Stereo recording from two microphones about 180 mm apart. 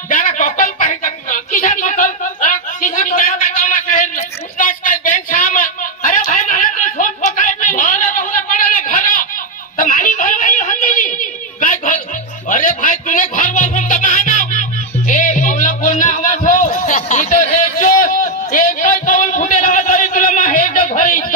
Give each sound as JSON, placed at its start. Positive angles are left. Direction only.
{"t": 0.1, "sound": "a sound", "side_deg": 45}
{"t": 9.8, "sound": "snicker", "side_deg": 50}
{"t": 12.4, "sound": "music", "side_deg": 45}